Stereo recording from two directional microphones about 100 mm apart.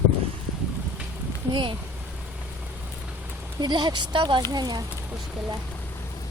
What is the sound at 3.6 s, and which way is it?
Speech, 45° right (ahead or behind).